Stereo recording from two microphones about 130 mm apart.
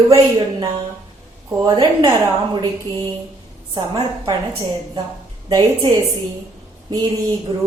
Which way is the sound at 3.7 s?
30° right (ahead or behind).